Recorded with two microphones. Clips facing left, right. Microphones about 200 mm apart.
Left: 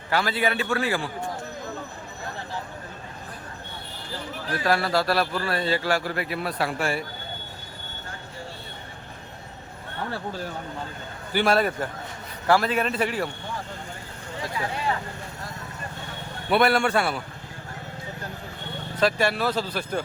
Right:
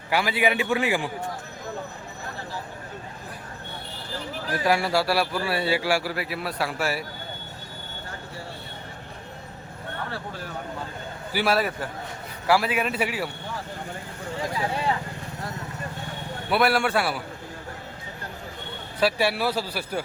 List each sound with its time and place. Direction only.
0.1 s a man's voice: 15° right (ahead or behind)
4.5 s a man's voice: 10° right (ahead or behind)
11.3 s a man's voice: 5° right (ahead or behind)
16.5 s a man's voice: 5° right (ahead or behind)
18.9 s a man's voice: 10° right (ahead or behind)